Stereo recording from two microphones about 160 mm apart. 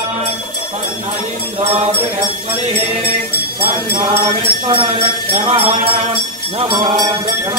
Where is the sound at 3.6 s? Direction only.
30° right (ahead or behind).